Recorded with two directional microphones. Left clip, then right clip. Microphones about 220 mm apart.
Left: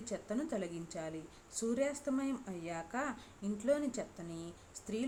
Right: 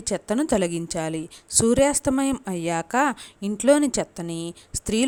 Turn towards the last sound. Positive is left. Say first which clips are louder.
# right 16 dB
turn(degrees=-45)  # may be behind; listen again after turning